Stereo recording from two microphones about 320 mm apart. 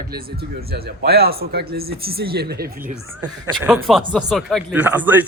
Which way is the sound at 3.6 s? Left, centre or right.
Centre.